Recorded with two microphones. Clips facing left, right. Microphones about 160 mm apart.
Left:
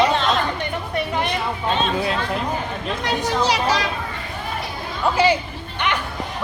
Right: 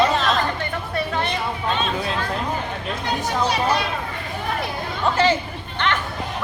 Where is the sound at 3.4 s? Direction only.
90° left.